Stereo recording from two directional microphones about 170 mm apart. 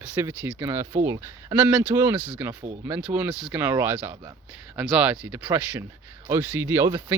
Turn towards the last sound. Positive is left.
turn(degrees=-15)  # may be behind; listen again after turning